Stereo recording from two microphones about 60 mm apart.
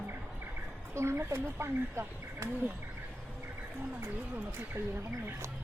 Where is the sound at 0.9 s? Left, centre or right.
Right.